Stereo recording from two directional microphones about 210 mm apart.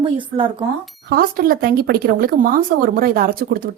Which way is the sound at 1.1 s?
45° right (ahead or behind).